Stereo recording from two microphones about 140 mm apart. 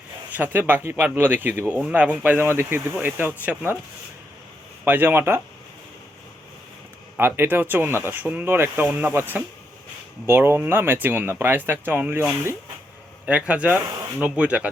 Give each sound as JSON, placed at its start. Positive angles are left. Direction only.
{"t": 0.3, "sound": "speech", "side_deg": -10}
{"t": 4.9, "sound": "speech", "side_deg": -15}
{"t": 7.2, "sound": "speech", "side_deg": -15}